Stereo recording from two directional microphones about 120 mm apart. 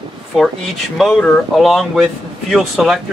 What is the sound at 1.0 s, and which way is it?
Speech, 5° left (ahead or behind).